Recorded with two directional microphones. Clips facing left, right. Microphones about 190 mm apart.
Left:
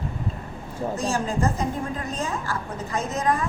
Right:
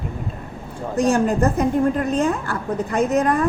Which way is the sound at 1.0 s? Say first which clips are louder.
Right 9 dB; 60° right (ahead or behind).